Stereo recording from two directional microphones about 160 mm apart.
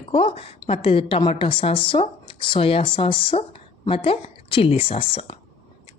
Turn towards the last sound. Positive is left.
turn(degrees=35)  # may be behind; listen again after turning